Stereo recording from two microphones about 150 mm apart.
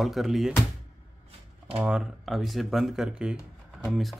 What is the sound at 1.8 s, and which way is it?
Speech, 5° right (ahead or behind).